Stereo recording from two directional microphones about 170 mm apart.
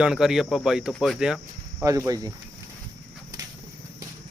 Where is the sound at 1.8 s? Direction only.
20° right (ahead or behind).